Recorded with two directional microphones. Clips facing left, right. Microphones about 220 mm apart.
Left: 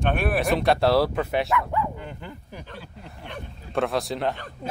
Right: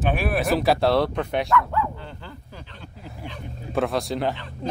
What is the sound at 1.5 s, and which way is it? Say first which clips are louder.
Dog: right 3 dB; 15° left (ahead or behind).